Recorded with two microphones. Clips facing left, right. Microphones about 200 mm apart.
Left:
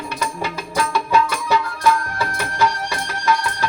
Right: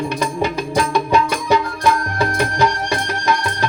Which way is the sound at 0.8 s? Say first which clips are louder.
Right 2 dB; 20° right (ahead or behind).